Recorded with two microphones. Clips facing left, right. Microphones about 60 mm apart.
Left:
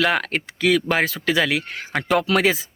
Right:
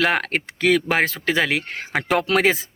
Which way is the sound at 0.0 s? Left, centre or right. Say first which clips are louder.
Even; right.